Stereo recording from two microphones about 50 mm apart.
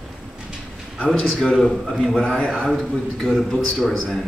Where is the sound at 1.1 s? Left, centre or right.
Centre.